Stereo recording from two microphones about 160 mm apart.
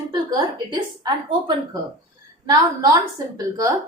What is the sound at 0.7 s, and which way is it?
A woman's voice, 25° right (ahead or behind).